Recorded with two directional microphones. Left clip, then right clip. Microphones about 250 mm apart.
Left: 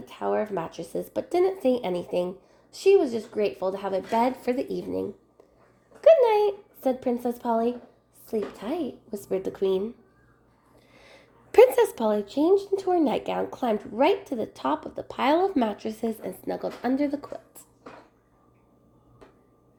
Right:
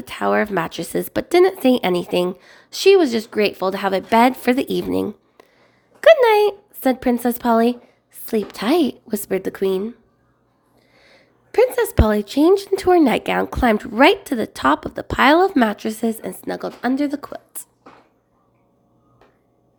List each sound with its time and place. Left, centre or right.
0.0 s speech: right
10.9 s a sound: centre
11.9 s speech: right